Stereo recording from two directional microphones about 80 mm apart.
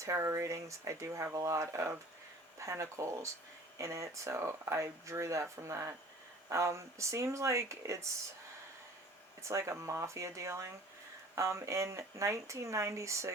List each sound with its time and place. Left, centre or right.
0.0 s speech: right
9.4 s speech: right